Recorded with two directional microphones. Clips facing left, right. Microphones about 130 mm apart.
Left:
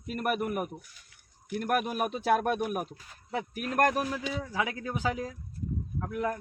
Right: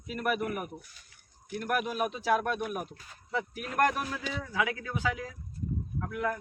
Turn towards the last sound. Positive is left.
turn(degrees=30)  # may be behind; listen again after turning